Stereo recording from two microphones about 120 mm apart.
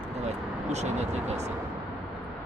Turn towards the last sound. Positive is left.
turn(degrees=-65)  # may be behind; listen again after turning